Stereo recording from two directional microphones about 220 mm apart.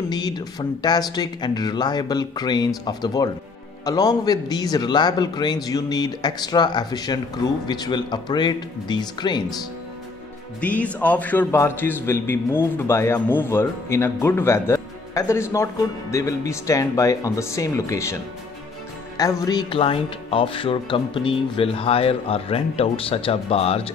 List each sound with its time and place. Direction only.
0.1 s a man's voice: 20° left (ahead or behind)
10.6 s a man's voice: 5° left (ahead or behind)
19.1 s speech: 15° left (ahead or behind)